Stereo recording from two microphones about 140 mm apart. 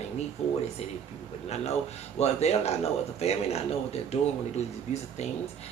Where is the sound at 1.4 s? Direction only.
50° left (ahead or behind).